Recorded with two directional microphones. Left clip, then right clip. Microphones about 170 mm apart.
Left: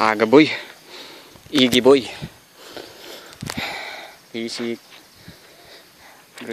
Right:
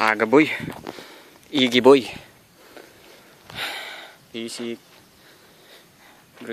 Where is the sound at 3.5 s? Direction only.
20° right (ahead or behind).